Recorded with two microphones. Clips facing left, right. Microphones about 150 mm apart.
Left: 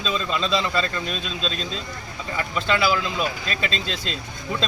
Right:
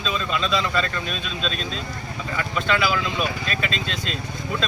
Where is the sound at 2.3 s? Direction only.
25° left (ahead or behind).